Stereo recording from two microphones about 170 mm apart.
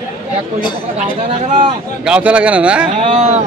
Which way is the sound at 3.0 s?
35° right (ahead or behind).